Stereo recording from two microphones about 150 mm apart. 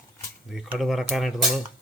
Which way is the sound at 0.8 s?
Centre (ahead or behind).